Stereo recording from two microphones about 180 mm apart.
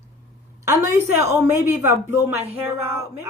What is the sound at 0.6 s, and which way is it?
Speech, 15° right (ahead or behind).